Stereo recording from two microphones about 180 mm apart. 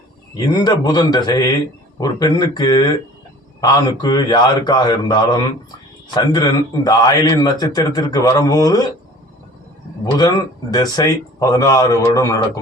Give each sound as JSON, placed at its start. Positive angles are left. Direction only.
{"t": 0.3, "sound": "a man's voice", "side_deg": 20}
{"t": 10.0, "sound": "a man's voice", "side_deg": 20}